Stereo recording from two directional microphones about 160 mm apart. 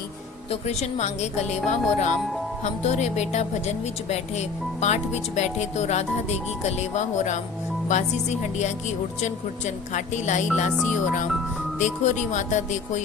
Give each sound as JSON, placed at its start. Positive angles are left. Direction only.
{"t": 0.5, "sound": "speech", "side_deg": 45}
{"t": 11.8, "sound": "speech", "side_deg": 50}